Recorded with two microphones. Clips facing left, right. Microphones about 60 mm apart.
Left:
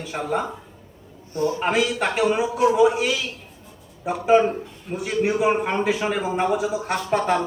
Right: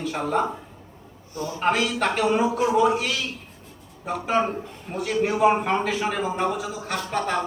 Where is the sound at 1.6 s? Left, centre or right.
Centre.